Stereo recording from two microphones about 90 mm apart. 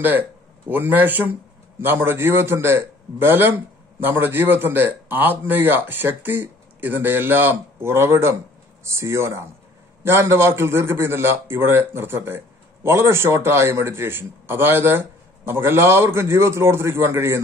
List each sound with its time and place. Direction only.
0.7 s a man's voice: 20° right (ahead or behind)